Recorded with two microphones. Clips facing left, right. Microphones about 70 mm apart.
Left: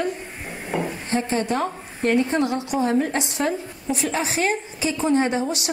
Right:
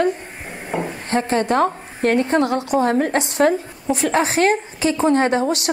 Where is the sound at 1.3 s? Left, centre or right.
Right.